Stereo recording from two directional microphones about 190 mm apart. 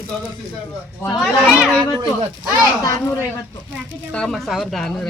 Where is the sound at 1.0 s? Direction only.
Centre (ahead or behind).